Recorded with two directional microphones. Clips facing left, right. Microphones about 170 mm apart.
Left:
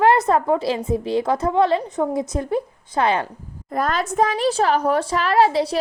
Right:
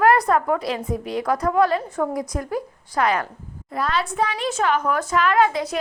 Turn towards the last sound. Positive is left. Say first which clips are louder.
# left 2 dB
turn(degrees=35)  # may be behind; listen again after turning